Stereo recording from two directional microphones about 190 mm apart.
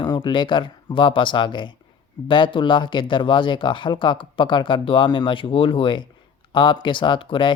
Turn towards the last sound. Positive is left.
turn(degrees=25)  # may be behind; listen again after turning